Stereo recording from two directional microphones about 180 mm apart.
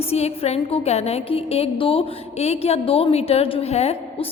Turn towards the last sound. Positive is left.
turn(degrees=35)  # may be behind; listen again after turning